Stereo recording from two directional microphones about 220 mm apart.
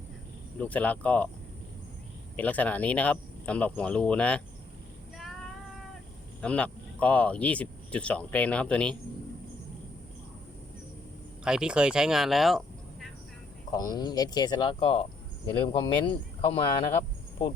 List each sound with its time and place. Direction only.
0.6 s speech: 5° left (ahead or behind)
2.3 s speech: 5° left (ahead or behind)
6.4 s speech: 5° left (ahead or behind)
11.4 s speech: 5° right (ahead or behind)
13.7 s speech: 15° left (ahead or behind)